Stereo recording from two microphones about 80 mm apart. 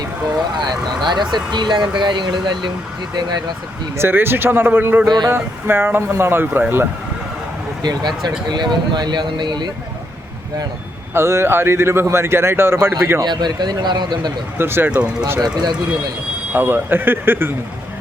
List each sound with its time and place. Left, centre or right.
0.5 s speech: right
3.9 s speech: right
7.8 s speech: right
11.1 s speech: right
13.2 s speech: right
14.6 s speech: right
14.8 s speech: centre
15.4 s speech: right
16.5 s speech: right